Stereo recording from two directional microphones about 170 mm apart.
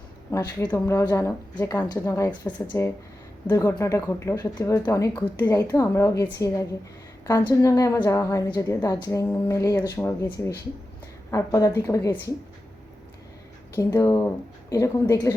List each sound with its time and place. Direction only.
0.3 s a woman's voice: 20° left (ahead or behind)
13.7 s a woman's voice: 20° left (ahead or behind)